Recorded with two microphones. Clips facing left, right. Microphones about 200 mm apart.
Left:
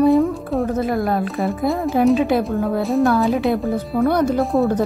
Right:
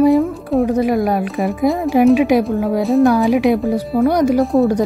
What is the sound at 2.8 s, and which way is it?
Speech, centre (ahead or behind).